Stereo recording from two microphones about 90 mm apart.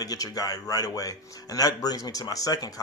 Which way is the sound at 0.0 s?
45° left (ahead or behind).